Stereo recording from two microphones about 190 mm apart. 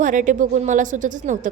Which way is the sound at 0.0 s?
45° right (ahead or behind).